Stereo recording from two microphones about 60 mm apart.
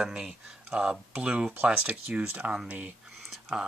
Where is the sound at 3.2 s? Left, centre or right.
Centre.